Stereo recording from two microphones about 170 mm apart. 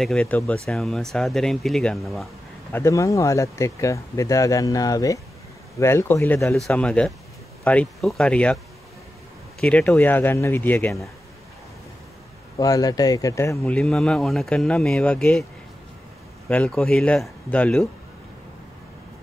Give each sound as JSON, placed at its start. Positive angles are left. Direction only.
{"t": 0.0, "sound": "speech", "side_deg": 5}
{"t": 2.7, "sound": "speech", "side_deg": 15}
{"t": 9.6, "sound": "speech", "side_deg": 5}
{"t": 12.5, "sound": "speech", "side_deg": 20}
{"t": 13.7, "sound": "speech", "side_deg": 5}
{"t": 16.4, "sound": "speech", "side_deg": 5}